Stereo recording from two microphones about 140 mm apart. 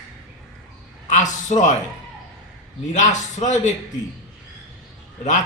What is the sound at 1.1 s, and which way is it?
Speech, 60° left (ahead or behind).